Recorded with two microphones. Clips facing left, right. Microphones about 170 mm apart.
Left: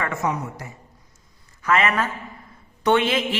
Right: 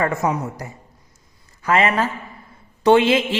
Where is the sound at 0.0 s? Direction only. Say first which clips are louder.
Right 4 dB; 35° right (ahead or behind).